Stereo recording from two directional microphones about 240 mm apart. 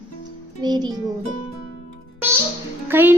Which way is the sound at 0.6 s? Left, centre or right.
Centre.